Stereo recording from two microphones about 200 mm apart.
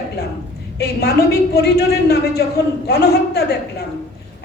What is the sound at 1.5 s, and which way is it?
A man's voice, 55° left (ahead or behind).